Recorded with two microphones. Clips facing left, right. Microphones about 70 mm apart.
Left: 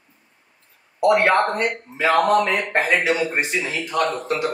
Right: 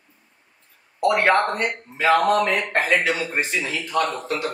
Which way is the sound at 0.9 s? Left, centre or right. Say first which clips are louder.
Left 2 dB; centre.